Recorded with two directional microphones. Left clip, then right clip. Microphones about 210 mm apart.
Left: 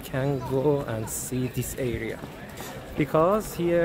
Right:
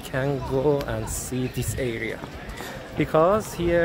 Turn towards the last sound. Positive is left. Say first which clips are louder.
# right 2 dB
turn(degrees=0)  # may be behind; listen again after turning